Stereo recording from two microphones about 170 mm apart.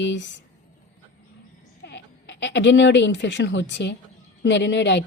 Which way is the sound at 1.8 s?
90° left.